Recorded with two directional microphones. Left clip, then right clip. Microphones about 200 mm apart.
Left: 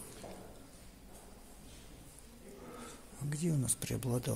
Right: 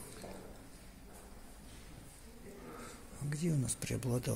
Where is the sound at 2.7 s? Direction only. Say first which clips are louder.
Even; 5° left (ahead or behind).